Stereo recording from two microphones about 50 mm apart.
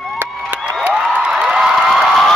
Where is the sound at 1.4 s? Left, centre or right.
Centre.